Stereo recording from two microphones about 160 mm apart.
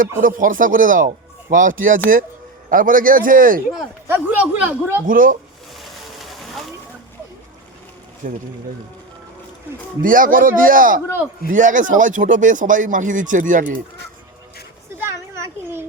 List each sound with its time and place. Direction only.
0.2 s speech: 55° right (ahead or behind)
4.0 s speech: 15° right (ahead or behind)
5.0 s speech: 60° right (ahead or behind)
5.7 s a sound: centre (ahead or behind)
8.2 s speech: 55° right (ahead or behind)
10.0 s speech: 60° right (ahead or behind)
15.0 s a sound: 15° right (ahead or behind)